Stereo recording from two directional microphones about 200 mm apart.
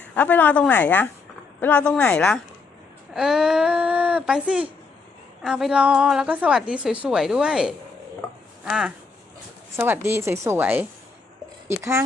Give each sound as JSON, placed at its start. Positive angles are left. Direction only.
{"t": 0.1, "sound": "a woman's voice", "side_deg": 10}